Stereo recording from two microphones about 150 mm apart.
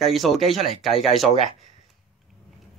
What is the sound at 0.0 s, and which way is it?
Speech, centre (ahead or behind).